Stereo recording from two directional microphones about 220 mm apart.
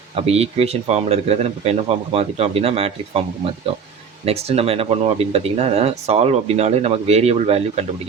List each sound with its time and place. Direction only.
0.2 s speech: 30° right (ahead or behind)
4.3 s speech: 25° right (ahead or behind)